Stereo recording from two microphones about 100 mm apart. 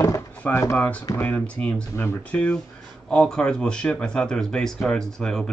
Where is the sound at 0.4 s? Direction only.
25° left (ahead or behind).